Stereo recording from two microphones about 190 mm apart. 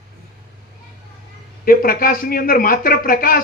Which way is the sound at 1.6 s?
50° left (ahead or behind).